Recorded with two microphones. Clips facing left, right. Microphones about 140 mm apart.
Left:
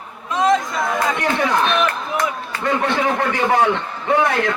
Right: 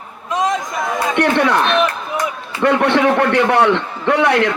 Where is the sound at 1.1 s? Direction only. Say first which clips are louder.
Right 5 dB; 70° right (ahead or behind).